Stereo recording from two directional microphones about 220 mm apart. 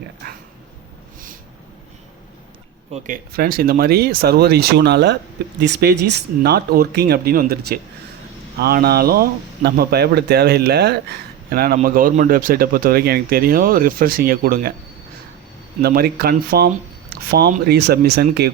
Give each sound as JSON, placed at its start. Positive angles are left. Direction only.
{"t": 0.2, "sound": "speech", "side_deg": -45}
{"t": 2.9, "sound": "speech", "side_deg": -40}
{"t": 15.8, "sound": "speech", "side_deg": -45}